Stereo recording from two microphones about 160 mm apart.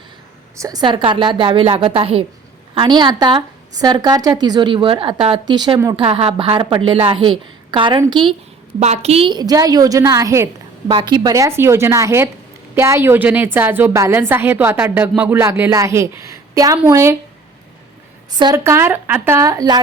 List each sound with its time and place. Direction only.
0.5 s a woman's voice: 20° right (ahead or behind)
8.8 s a woman's voice: 45° right (ahead or behind); by 17.2 s 15° right (ahead or behind)
18.3 s a woman's voice: 25° right (ahead or behind)
18.6 s a woman's voice: 15° right (ahead or behind)